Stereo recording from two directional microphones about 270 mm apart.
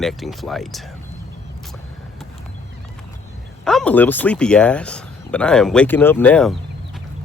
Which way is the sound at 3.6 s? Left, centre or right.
Centre.